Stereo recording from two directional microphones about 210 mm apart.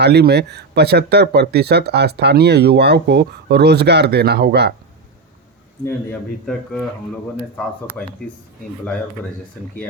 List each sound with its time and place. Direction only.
0.0 s speech: 50° right (ahead or behind)
5.8 s speech: 5° left (ahead or behind)